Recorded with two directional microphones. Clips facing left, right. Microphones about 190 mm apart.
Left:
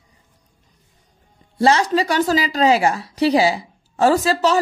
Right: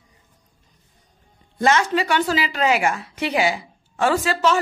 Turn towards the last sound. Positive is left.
turn(degrees=35)  # may be behind; listen again after turning